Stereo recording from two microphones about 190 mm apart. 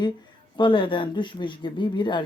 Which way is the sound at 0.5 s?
25° left (ahead or behind).